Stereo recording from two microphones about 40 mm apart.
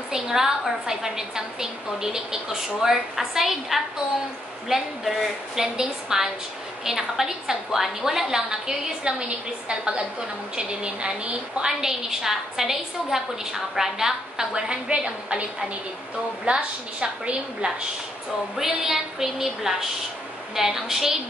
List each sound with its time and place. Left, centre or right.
0.1 s a woman's voice: centre
14.5 s a woman's voice: right
16.4 s a woman's voice: right
18.6 s a woman's voice: centre